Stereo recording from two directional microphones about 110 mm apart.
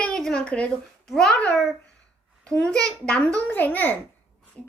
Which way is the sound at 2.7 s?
10° left (ahead or behind).